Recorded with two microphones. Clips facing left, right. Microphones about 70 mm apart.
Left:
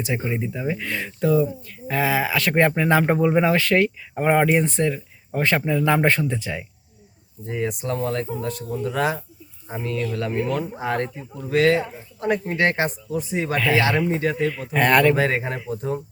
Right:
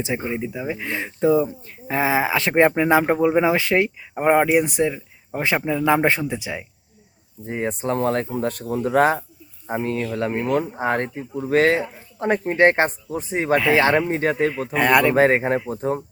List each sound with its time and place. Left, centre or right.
0.3 s speech: centre
0.9 s speech: right
7.4 s speech: right
14.7 s speech: centre
15.1 s speech: right